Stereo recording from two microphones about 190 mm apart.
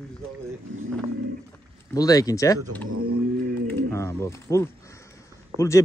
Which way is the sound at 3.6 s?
15° left (ahead or behind).